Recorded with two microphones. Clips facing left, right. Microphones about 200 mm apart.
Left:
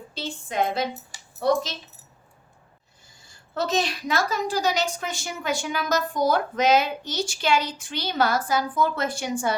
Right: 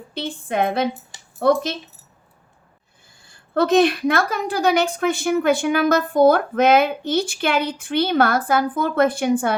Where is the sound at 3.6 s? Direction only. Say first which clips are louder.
Right 10 dB; 55° right (ahead or behind).